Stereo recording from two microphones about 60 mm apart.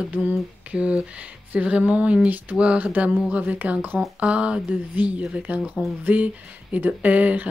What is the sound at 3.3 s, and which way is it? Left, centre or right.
Speech, right.